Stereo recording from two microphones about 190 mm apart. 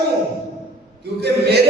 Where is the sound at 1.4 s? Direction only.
60° right (ahead or behind).